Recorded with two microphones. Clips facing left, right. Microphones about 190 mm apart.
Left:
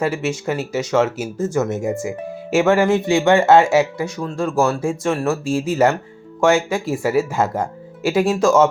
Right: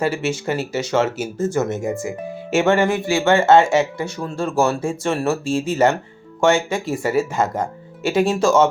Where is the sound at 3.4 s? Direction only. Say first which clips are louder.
Left 1 dB; centre (ahead or behind).